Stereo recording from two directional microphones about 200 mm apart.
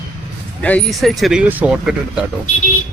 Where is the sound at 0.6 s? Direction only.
5° left (ahead or behind).